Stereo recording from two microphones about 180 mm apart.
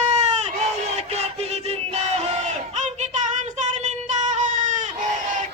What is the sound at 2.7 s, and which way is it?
Child singing, 40° right (ahead or behind).